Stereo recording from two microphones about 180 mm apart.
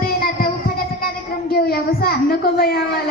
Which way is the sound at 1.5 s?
60° left (ahead or behind).